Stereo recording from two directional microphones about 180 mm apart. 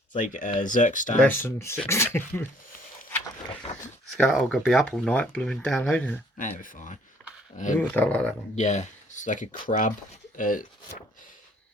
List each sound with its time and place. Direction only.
0.2 s speech: 45° left (ahead or behind)
1.2 s speech: 10° left (ahead or behind)
3.7 s speech: 40° left (ahead or behind)
4.3 s speech: 5° left (ahead or behind)
6.4 s speech: 45° left (ahead or behind)
7.8 s speech: 10° left (ahead or behind)
8.5 s speech: 40° left (ahead or behind)